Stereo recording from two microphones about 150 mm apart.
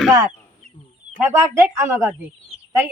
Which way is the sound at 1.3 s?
20° right (ahead or behind).